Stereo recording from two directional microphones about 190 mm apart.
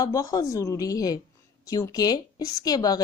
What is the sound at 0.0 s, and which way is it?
A woman's voice, 20° left (ahead or behind).